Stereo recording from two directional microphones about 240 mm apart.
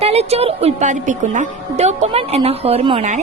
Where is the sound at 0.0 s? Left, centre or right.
Right.